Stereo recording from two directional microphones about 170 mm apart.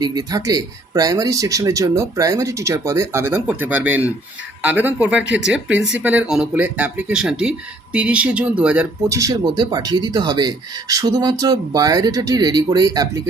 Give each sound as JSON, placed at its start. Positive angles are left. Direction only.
{"t": 0.0, "sound": "speech", "side_deg": -25}
{"t": 9.0, "sound": "speech", "side_deg": -20}